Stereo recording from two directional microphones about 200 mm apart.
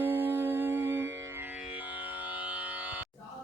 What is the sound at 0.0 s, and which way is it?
Music, 10° right (ahead or behind).